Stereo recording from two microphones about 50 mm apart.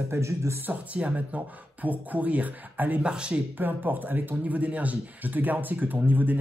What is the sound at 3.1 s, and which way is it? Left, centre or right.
Speech, centre.